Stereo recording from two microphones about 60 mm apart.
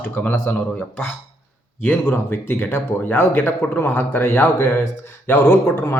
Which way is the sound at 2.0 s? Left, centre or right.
Left.